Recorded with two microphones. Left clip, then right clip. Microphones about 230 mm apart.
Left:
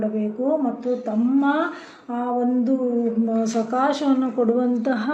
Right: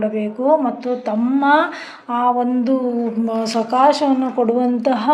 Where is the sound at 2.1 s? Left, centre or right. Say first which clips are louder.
Right 6 dB; centre.